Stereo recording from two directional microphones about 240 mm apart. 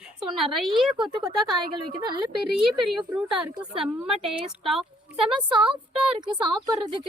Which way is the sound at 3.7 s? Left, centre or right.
Right.